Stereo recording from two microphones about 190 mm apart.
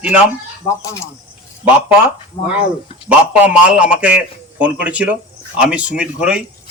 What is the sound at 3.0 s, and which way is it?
A man's voice, 5° right (ahead or behind).